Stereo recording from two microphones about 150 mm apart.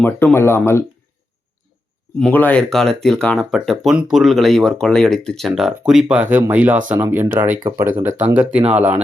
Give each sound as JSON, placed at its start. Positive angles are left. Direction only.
{"t": 0.0, "sound": "speech", "side_deg": 10}
{"t": 2.1, "sound": "speech", "side_deg": 10}